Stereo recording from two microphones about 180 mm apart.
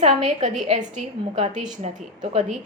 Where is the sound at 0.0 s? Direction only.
40° right (ahead or behind).